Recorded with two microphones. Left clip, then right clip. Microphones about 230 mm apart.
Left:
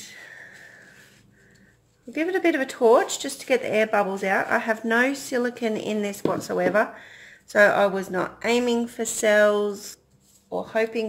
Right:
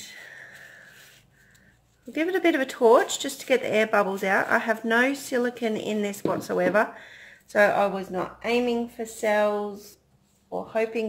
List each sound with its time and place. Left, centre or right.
0.0 s whispering: centre
2.1 s speech: centre
7.6 s speech: centre
10.7 s speech: centre